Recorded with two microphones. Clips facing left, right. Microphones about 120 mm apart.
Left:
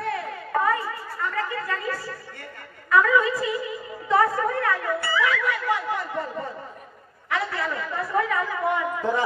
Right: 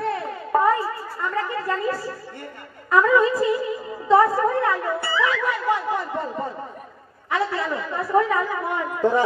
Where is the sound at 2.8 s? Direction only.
35° right (ahead or behind).